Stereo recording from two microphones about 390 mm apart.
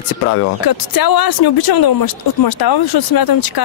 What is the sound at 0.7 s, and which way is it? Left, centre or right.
Speech, left.